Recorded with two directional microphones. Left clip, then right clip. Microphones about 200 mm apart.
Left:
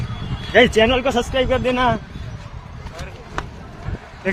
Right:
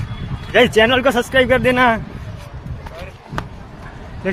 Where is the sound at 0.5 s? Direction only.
15° right (ahead or behind).